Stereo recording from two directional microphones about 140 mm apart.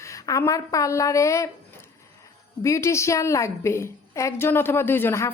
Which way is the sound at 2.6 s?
20° left (ahead or behind).